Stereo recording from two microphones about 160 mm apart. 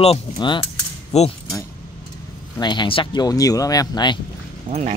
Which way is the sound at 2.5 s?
30° left (ahead or behind).